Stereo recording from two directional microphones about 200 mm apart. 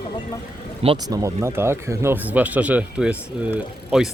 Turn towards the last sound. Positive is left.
turn(degrees=-5)  # may be behind; listen again after turning